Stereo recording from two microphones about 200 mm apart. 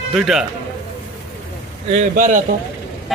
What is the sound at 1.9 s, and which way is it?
Speech, 35° right (ahead or behind).